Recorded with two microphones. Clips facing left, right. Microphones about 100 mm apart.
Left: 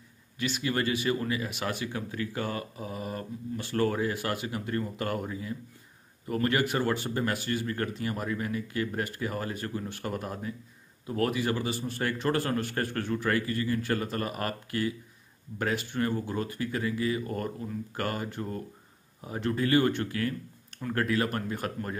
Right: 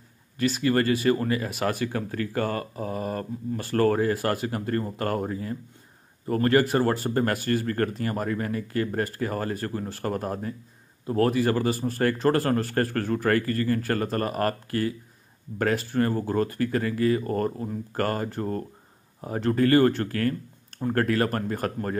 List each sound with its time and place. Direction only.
0.4 s speech: 40° right (ahead or behind)